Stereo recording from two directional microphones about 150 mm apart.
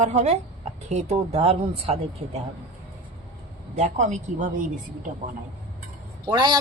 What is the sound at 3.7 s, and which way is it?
Speech, 50° right (ahead or behind).